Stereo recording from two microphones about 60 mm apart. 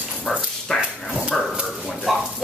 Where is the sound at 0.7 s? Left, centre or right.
Centre.